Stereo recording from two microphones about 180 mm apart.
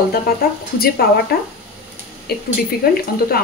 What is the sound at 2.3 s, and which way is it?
Speech, 60° left (ahead or behind).